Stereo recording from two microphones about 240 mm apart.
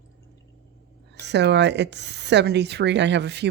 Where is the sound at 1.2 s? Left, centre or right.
Right.